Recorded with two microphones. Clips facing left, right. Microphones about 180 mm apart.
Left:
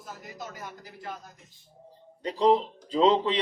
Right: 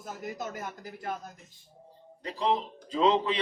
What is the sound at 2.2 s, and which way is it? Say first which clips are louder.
Speech: left 6 dB; 35° left (ahead or behind).